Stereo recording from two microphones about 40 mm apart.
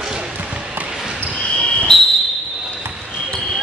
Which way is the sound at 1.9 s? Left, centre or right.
Centre.